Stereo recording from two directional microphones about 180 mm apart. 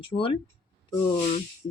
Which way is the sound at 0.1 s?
30° left (ahead or behind).